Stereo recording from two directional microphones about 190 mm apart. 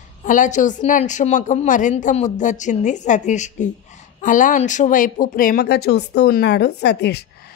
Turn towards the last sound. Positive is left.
turn(degrees=60)  # may be behind; listen again after turning